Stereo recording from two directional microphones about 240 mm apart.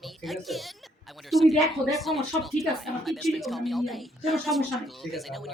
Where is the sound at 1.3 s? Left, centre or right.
Centre.